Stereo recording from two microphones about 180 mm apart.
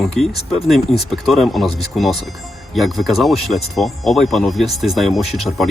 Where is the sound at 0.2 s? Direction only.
Centre (ahead or behind).